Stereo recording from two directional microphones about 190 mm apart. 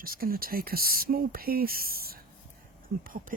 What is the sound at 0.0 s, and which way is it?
Speech, 50° right (ahead or behind).